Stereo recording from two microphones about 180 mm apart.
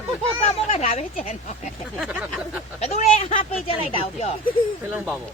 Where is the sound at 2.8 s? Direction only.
35° left (ahead or behind).